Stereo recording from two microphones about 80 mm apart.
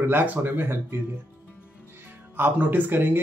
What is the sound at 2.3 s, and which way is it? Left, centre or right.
Speech, right.